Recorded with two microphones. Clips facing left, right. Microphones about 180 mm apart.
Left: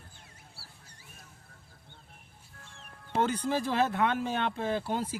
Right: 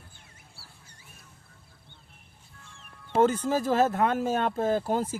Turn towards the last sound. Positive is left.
turn(degrees=-45)  # may be behind; listen again after turning